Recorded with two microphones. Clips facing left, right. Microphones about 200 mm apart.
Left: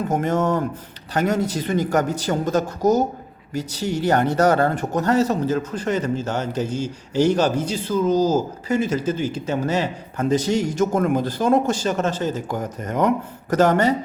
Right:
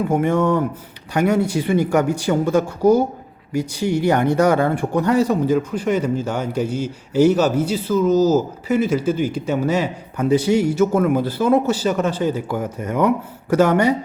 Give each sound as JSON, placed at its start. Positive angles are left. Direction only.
{"t": 1.1, "sound": "speech", "side_deg": -10}